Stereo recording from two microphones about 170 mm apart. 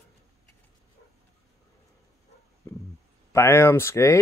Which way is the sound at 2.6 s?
15° left (ahead or behind).